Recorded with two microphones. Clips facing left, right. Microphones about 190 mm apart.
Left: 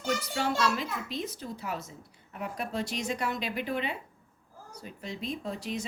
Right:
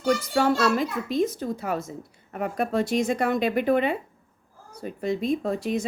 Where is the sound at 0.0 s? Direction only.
50° right (ahead or behind).